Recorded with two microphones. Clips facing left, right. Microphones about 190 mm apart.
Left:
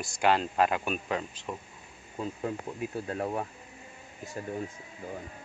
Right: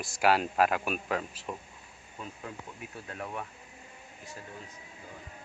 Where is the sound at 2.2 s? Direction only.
30° left (ahead or behind).